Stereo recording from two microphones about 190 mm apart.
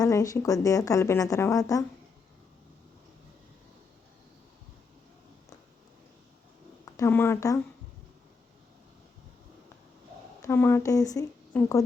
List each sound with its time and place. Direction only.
0.0 s speech: 15° left (ahead or behind)
6.9 s speech: 15° left (ahead or behind)
10.4 s speech: 10° left (ahead or behind)